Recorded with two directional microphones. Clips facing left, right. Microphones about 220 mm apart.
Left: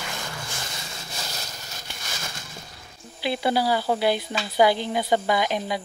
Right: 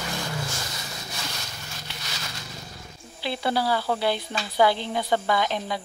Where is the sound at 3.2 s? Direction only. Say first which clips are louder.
Left 3 dB; 15° left (ahead or behind).